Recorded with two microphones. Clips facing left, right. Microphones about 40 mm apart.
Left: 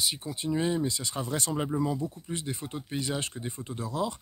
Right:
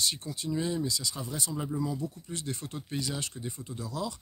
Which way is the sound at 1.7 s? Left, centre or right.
Left.